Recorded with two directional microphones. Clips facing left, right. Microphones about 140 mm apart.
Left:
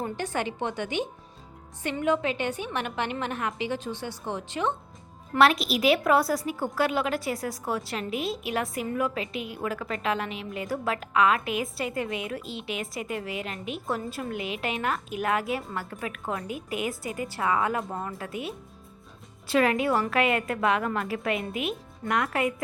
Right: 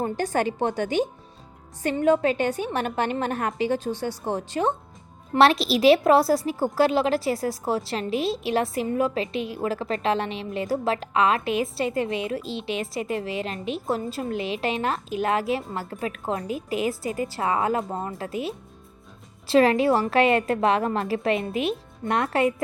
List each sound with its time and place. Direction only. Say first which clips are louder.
0.0 s a woman's voice: right 6 dB; 40° right (ahead or behind)